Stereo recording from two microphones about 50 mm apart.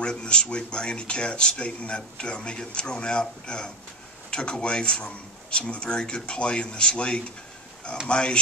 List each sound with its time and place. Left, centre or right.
0.0 s speech: centre